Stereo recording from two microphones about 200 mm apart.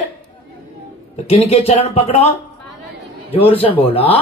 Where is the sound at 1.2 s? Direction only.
30° left (ahead or behind).